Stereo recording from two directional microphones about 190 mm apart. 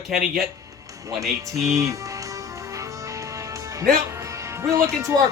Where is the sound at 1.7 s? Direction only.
15° right (ahead or behind).